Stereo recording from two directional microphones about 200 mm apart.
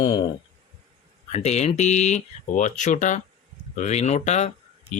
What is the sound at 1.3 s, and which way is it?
Speech, 30° left (ahead or behind).